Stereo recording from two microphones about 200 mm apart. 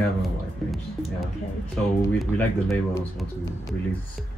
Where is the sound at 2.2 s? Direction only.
Centre (ahead or behind).